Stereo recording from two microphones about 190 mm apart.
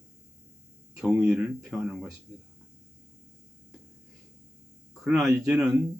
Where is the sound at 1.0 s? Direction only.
5° right (ahead or behind).